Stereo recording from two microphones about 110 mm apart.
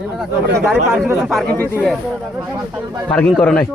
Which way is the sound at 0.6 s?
5° right (ahead or behind).